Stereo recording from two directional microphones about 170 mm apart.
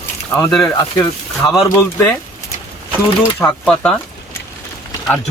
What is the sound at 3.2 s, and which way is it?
Speech, 10° left (ahead or behind).